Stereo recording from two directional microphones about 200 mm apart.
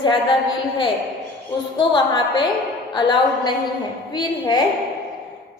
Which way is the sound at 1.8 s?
25° left (ahead or behind).